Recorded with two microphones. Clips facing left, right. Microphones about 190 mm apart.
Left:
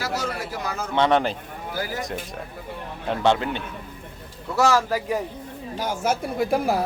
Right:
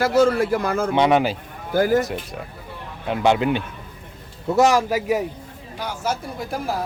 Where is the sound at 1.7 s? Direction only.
50° right (ahead or behind).